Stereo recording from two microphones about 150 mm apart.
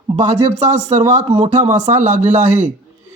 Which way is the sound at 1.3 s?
30° right (ahead or behind).